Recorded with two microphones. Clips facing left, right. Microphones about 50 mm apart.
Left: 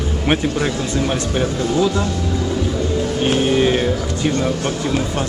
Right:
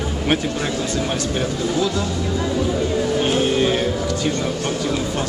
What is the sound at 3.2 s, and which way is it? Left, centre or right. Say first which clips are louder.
Speech: left 4 dB; centre.